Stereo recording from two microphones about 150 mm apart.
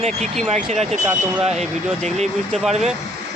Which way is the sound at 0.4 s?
50° right (ahead or behind).